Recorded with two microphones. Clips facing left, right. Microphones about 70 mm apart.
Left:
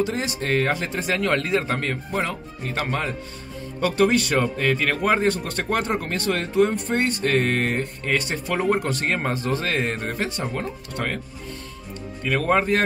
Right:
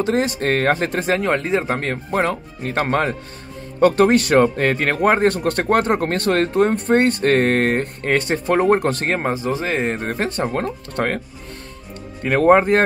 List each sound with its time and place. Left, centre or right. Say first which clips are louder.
0.0 s speech: right 6 dB; right
1.2 s speech: right 3 dB; right
9.2 s speech: right 3 dB; centre
10.0 s speech: right 5 dB; right
12.2 s speech: right 8 dB; right